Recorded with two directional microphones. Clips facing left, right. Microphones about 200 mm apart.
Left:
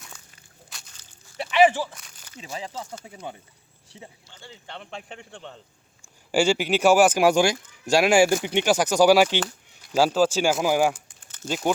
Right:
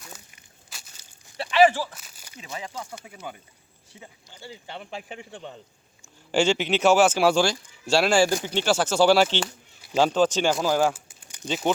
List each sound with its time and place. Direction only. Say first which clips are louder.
0.7 s crushing: right 2 dB; 5° right (ahead or behind)
1.4 s walk: even; 20° left (ahead or behind)
2.0 s a sound: left 1 dB; 5° right (ahead or behind)
2.4 s speech: left 1 dB; 30° left (ahead or behind)
4.3 s a man's voice: right 5 dB; 10° right (ahead or behind)
6.3 s speech: left 1 dB; 10° left (ahead or behind)
10.9 s a sound: right 1 dB; 5° right (ahead or behind)
11.4 s a man's voice: even; 5° left (ahead or behind)